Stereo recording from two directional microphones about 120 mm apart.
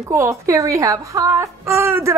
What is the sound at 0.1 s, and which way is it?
A woman's voice, 25° right (ahead or behind).